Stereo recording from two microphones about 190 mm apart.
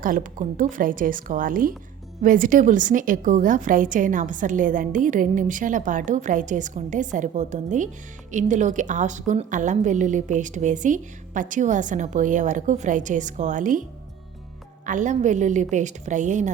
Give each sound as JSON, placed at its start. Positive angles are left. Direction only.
{"t": 0.0, "sound": "a woman's voice", "side_deg": -45}
{"t": 14.8, "sound": "a woman's voice", "side_deg": -40}